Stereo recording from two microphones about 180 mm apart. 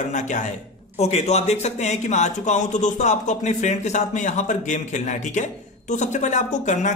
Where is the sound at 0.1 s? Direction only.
40° left (ahead or behind).